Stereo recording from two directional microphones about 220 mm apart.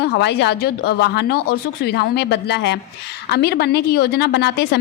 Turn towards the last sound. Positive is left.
turn(degrees=50)  # may be behind; listen again after turning